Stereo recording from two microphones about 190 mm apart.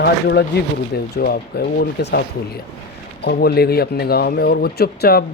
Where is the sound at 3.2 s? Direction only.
55° left (ahead or behind).